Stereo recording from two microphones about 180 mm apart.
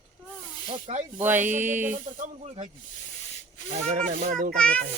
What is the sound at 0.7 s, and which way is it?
Speech, 35° right (ahead or behind).